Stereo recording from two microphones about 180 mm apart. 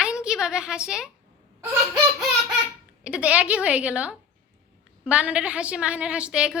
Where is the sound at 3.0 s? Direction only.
5° right (ahead or behind).